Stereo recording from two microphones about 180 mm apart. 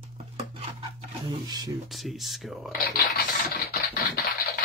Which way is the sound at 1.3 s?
25° right (ahead or behind).